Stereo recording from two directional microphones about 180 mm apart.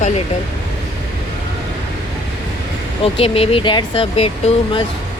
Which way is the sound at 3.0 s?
30° left (ahead or behind).